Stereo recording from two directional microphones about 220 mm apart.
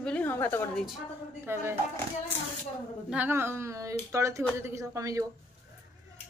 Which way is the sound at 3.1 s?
10° right (ahead or behind).